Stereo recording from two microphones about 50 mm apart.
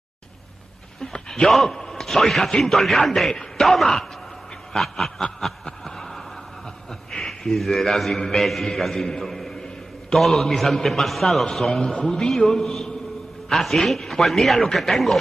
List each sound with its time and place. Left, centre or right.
1.1 s a man's voice: centre